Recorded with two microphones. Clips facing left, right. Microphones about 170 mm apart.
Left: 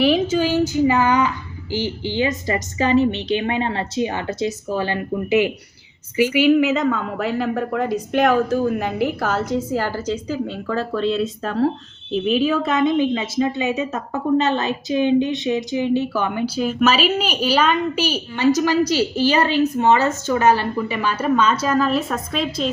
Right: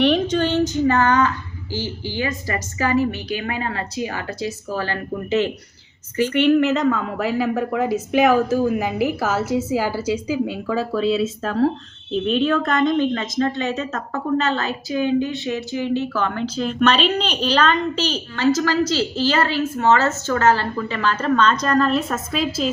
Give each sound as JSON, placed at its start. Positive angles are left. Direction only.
{"t": 0.0, "sound": "a woman's voice", "side_deg": 5}